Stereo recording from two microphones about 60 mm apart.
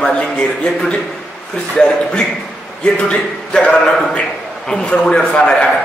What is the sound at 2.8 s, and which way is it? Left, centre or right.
A man's voice, centre.